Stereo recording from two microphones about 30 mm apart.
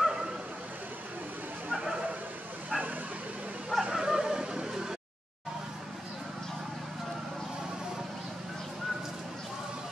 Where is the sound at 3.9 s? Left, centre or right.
Centre.